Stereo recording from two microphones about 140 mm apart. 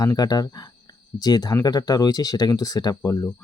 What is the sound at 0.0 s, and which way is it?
Speech, 30° left (ahead or behind).